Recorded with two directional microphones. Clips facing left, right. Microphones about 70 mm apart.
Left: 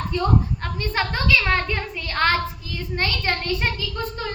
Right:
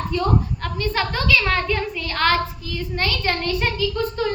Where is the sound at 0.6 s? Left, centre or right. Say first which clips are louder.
Right 2 dB; left.